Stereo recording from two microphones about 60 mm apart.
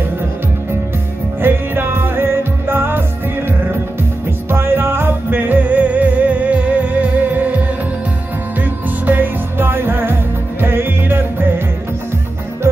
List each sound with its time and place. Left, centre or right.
1.4 s music: right
4.5 s music: right
9.0 s music: right